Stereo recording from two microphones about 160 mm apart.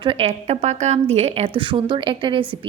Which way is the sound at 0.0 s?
35° right (ahead or behind).